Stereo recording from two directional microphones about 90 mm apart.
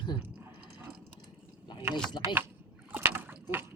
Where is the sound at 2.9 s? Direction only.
25° right (ahead or behind).